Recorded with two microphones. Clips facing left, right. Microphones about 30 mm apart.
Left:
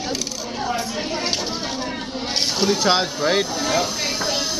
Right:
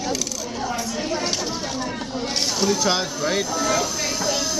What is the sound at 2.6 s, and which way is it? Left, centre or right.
Speech, left.